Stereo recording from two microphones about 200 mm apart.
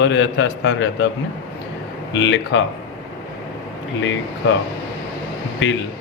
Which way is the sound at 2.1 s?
60° left (ahead or behind).